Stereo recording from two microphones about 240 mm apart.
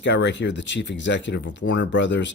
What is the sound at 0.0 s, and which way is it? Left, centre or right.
Speech, left.